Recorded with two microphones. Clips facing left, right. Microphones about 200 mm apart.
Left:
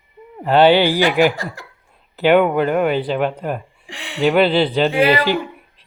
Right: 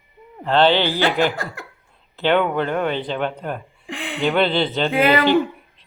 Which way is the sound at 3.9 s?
55° right (ahead or behind).